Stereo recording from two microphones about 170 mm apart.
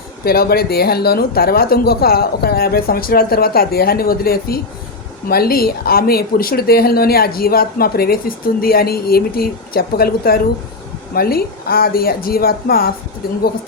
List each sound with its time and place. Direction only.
0.3 s speech: 65° left (ahead or behind)